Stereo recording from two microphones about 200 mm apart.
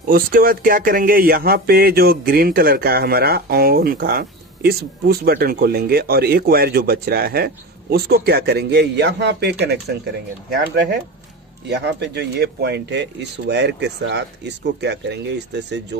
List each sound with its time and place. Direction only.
0.1 s speech: 45° right (ahead or behind)